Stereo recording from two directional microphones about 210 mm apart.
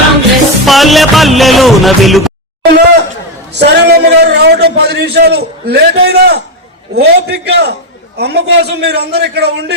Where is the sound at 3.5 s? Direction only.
55° right (ahead or behind).